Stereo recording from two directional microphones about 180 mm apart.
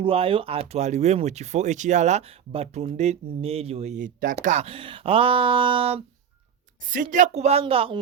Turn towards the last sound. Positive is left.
turn(degrees=-30)  # may be behind; listen again after turning